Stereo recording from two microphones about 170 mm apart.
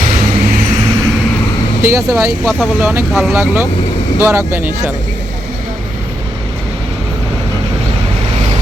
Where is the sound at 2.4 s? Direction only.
5° right (ahead or behind).